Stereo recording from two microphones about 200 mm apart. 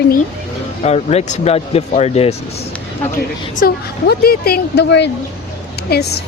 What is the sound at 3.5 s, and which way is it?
A woman's voice, 50° left (ahead or behind).